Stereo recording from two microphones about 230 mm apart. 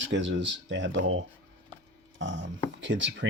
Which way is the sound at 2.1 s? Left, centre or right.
Right.